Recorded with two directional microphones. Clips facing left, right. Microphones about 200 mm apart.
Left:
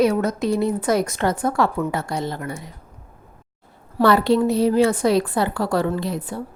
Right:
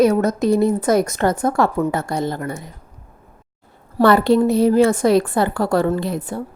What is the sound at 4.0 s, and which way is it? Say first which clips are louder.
A woman's voice: right 3 dB; 50° right (ahead or behind).